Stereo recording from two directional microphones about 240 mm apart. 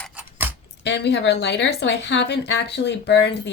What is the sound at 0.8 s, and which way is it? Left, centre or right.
Speech, left.